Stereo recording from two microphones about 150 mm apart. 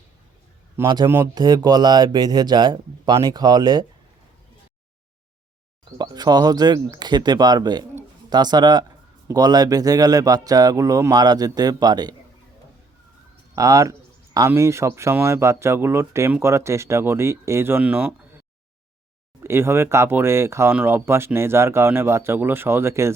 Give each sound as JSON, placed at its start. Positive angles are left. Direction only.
{"t": 1.0, "sound": "a man's voice", "side_deg": -20}
{"t": 6.0, "sound": "a man's voice", "side_deg": -30}
{"t": 13.6, "sound": "a man's voice", "side_deg": -25}
{"t": 19.4, "sound": "speech", "side_deg": -15}